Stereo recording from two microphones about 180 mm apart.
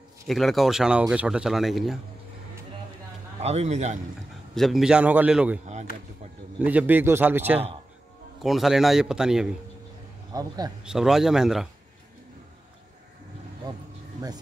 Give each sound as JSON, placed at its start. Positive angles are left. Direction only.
{"t": 0.3, "sound": "speech", "side_deg": 0}
{"t": 3.3, "sound": "a man's voice", "side_deg": -35}
{"t": 4.6, "sound": "speech", "side_deg": 0}
{"t": 6.6, "sound": "a man's voice", "side_deg": -10}
{"t": 10.3, "sound": "a man's voice", "side_deg": -20}
{"t": 10.8, "sound": "speech", "side_deg": -5}
{"t": 13.7, "sound": "a man's voice", "side_deg": -25}